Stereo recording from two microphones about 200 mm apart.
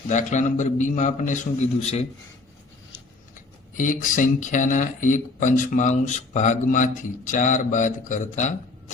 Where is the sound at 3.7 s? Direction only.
40° left (ahead or behind).